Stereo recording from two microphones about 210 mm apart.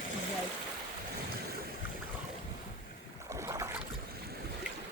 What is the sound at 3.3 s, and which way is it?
Boat, 15° right (ahead or behind).